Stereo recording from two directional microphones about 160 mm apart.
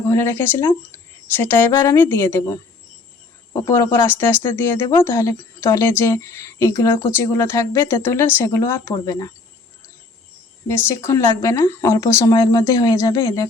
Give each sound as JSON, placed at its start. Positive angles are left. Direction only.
{"t": 0.1, "sound": "speech", "side_deg": 15}
{"t": 1.7, "sound": "speech", "side_deg": 25}
{"t": 2.0, "sound": "speech", "side_deg": 15}
{"t": 10.7, "sound": "speech", "side_deg": 15}